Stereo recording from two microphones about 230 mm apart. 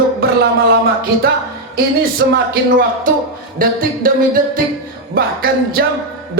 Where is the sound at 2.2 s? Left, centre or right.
Right.